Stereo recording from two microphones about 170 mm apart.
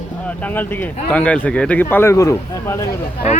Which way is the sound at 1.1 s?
5° left (ahead or behind).